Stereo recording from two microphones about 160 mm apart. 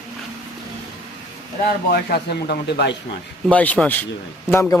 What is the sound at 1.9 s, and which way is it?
Speech, 75° left (ahead or behind).